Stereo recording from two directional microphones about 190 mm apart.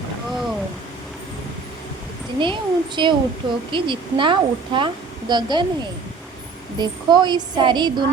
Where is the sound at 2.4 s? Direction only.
25° right (ahead or behind).